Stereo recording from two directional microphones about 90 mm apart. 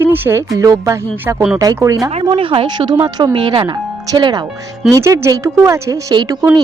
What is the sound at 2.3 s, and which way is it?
Speech, 90° right.